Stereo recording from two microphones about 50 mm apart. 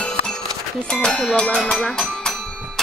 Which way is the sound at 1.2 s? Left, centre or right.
Left.